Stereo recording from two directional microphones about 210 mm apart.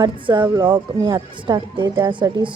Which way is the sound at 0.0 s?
20° right (ahead or behind).